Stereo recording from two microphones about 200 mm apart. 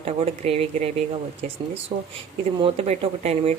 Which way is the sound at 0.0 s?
30° right (ahead or behind).